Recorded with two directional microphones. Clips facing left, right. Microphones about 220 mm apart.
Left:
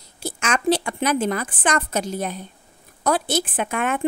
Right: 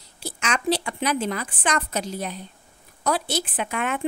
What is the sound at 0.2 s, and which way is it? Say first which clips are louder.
Speech: left 4 dB; 50° left (ahead or behind).